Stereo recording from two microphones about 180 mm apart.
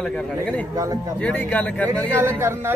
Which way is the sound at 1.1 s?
10° left (ahead or behind).